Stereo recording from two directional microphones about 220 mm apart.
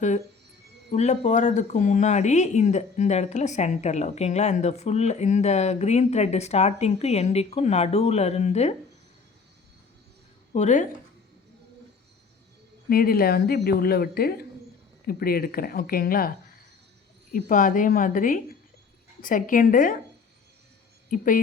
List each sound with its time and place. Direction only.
0.9 s speech: 30° left (ahead or behind)
10.5 s speech: 35° left (ahead or behind)
12.9 s speech: 40° left (ahead or behind)
17.3 s speech: 35° left (ahead or behind)
21.1 s speech: 35° left (ahead or behind)